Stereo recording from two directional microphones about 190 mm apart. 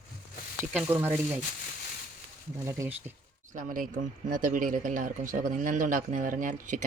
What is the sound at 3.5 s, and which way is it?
Speech, 45° right (ahead or behind).